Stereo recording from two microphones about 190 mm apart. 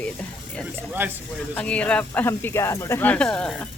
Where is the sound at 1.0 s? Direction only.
10° right (ahead or behind).